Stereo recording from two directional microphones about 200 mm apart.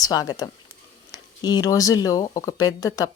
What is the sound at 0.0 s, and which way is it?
A woman's voice, 20° left (ahead or behind).